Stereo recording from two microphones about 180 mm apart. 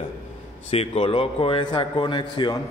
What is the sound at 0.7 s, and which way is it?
A man's voice, 35° left (ahead or behind).